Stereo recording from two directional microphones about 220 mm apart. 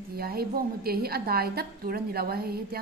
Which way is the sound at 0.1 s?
45° right (ahead or behind).